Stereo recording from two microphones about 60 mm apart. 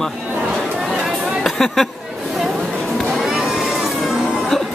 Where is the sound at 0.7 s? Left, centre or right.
Centre.